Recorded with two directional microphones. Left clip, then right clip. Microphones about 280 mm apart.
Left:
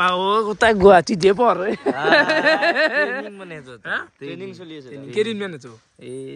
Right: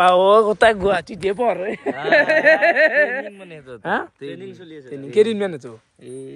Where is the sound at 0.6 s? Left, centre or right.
Centre.